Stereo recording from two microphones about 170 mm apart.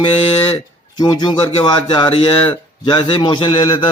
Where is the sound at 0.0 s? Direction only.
30° left (ahead or behind).